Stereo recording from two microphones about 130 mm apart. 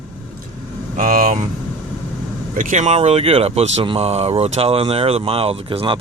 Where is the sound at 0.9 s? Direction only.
90° right.